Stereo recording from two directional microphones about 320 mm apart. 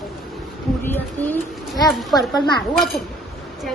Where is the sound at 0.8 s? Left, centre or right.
Centre.